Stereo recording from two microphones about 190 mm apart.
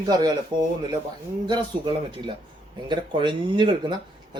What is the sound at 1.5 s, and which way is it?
Speech, 25° right (ahead or behind).